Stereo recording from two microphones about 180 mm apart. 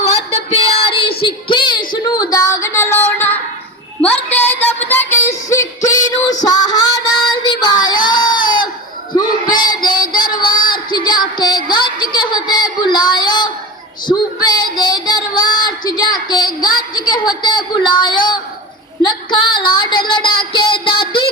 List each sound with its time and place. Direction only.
0.0 s child singing: 35° left (ahead or behind); by 3.3 s 10° left (ahead or behind)
4.0 s music: 10° left (ahead or behind)
6.4 s child singing: 20° left (ahead or behind)
9.1 s a sound: 25° left (ahead or behind)
14.4 s child singing: 25° left (ahead or behind)
17.1 s a sound: 25° left (ahead or behind)
20.5 s music: 30° left (ahead or behind)